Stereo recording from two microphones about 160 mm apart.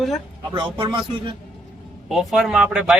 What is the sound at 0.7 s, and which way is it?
Speech, 30° right (ahead or behind).